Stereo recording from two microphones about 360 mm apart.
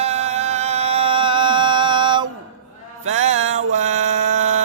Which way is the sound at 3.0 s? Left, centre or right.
Centre.